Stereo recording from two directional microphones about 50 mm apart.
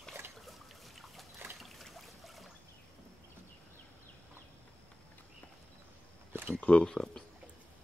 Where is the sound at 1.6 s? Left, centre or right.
Centre.